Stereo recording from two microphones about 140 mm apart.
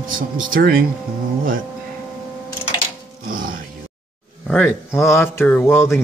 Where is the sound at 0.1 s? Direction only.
80° right.